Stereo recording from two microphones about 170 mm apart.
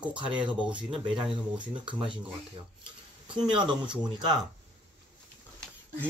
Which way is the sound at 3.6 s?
30° right (ahead or behind).